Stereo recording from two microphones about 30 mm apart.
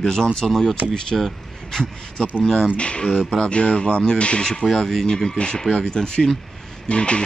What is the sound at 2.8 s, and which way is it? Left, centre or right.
Speech, left.